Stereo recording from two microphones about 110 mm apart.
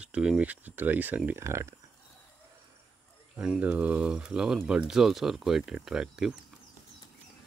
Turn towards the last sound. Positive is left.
turn(degrees=-5)  # may be behind; listen again after turning